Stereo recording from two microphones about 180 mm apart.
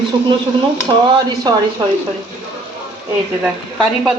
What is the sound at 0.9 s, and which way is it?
Speech, 25° right (ahead or behind).